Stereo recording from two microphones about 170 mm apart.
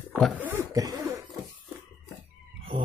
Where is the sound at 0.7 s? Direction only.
20° right (ahead or behind).